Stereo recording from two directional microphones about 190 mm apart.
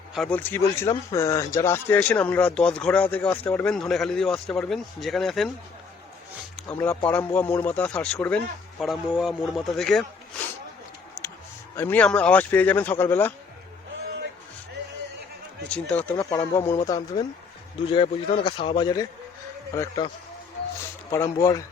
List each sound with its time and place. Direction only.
0.1 s speech: 5° left (ahead or behind)
6.6 s a man's voice: 10° left (ahead or behind)
11.8 s speech: 10° left (ahead or behind)
15.7 s speech: 5° left (ahead or behind)
16.1 s a man's voice: 20° left (ahead or behind)
21.1 s speech: 15° left (ahead or behind)